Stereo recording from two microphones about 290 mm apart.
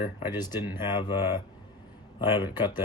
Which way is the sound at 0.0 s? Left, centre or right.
Centre.